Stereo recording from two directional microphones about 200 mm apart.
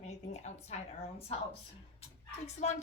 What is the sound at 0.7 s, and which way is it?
Speech, 35° left (ahead or behind).